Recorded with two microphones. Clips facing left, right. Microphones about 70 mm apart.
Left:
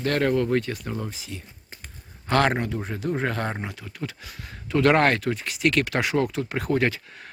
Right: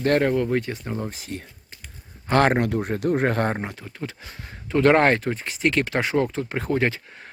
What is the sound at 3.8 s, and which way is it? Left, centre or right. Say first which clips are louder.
Speech: right 1 dB; right.